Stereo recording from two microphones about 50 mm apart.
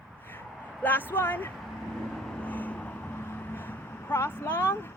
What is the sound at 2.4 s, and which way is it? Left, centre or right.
Vehicle, left.